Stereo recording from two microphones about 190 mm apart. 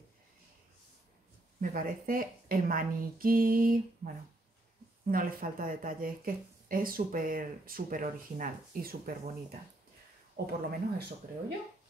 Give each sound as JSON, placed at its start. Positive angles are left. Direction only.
{"t": 1.6, "sound": "speech", "side_deg": -45}
{"t": 5.1, "sound": "speech", "side_deg": -50}
{"t": 10.3, "sound": "speech", "side_deg": -55}